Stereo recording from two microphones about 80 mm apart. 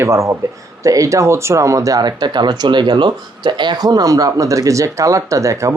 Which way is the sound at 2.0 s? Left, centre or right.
Right.